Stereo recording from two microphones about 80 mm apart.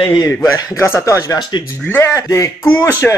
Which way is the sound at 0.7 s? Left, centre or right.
Left.